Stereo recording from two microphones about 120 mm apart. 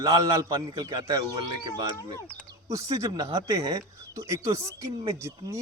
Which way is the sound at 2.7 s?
30° right (ahead or behind).